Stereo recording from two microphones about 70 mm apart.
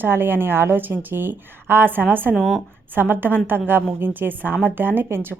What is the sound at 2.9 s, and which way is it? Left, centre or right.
A woman's voice, right.